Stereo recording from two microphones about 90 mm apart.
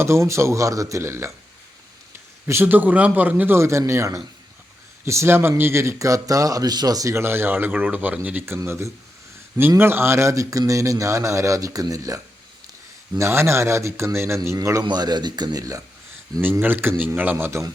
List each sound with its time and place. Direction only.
0.0 s a man's voice: 30° right (ahead or behind)
2.5 s a man's voice: 25° right (ahead or behind)
14.8 s speech: 50° right (ahead or behind)
16.4 s a man's voice: 25° right (ahead or behind)